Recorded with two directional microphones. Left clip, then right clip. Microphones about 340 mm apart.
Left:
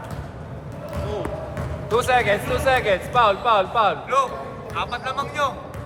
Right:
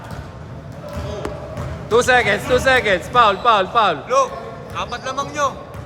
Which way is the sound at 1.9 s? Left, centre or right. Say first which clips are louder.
Right 4 dB; right.